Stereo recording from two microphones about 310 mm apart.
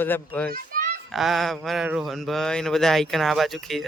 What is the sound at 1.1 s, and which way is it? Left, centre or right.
Speech, centre.